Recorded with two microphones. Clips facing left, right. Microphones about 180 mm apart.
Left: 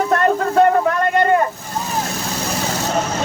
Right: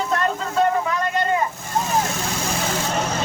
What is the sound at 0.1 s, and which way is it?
Vehicle, 55° left (ahead or behind).